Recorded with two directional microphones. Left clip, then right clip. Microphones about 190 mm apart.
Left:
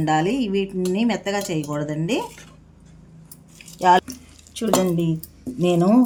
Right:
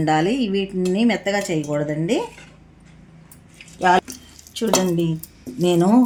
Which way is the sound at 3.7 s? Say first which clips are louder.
Left 1 dB; 15° right (ahead or behind).